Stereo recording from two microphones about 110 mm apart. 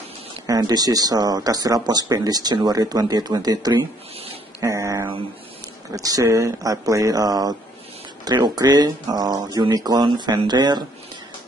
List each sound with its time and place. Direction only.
0.5 s speech: 35° right (ahead or behind)
4.6 s a sound: 30° right (ahead or behind)
5.9 s speech: 30° right (ahead or behind)
8.5 s speech: 40° right (ahead or behind)